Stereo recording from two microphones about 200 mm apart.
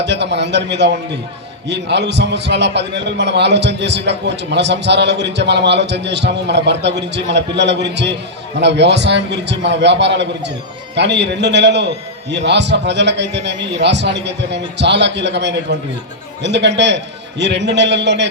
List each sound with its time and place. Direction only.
0.0 s a man's voice: 60° right (ahead or behind)